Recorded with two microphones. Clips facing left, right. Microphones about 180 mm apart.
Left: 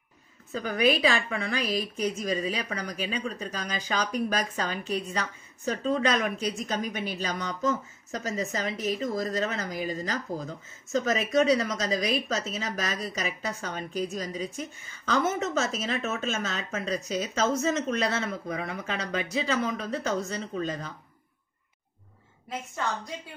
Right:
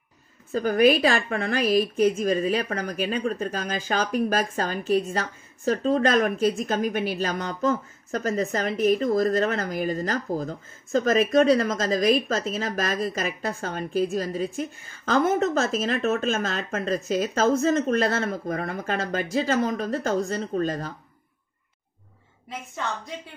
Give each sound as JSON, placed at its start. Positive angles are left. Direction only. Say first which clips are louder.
{"t": 0.5, "sound": "speech", "louder": "right 6 dB", "side_deg": -45}